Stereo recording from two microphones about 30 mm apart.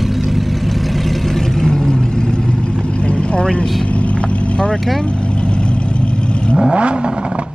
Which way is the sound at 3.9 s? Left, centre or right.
Left.